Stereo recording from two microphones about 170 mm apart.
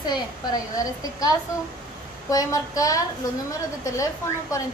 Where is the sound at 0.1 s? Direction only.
20° left (ahead or behind).